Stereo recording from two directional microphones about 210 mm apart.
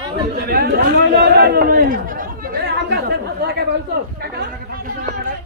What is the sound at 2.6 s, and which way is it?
Chatter, 50° right (ahead or behind).